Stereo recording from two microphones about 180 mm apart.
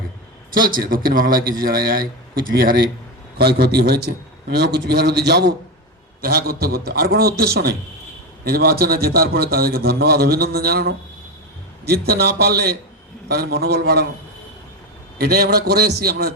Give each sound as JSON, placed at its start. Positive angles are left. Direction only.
{"t": 0.5, "sound": "a man's voice", "side_deg": -50}
{"t": 15.2, "sound": "a man's voice", "side_deg": -60}